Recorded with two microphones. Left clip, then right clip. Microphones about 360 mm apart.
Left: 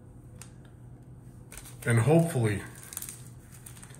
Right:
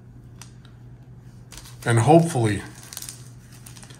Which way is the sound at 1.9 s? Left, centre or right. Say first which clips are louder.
Right 9 dB; centre.